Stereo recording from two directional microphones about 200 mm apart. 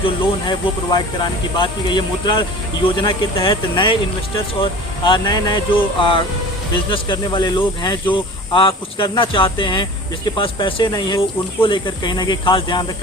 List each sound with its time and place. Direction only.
0.0 s speech: 20° left (ahead or behind)